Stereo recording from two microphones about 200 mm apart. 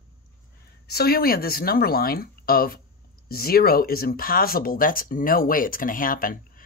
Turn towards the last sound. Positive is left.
turn(degrees=45)  # may be behind; listen again after turning